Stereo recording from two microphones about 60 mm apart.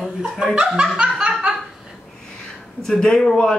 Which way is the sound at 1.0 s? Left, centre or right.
Centre.